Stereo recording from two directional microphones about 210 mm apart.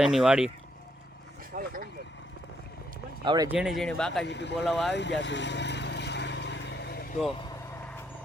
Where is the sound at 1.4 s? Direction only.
40° right (ahead or behind).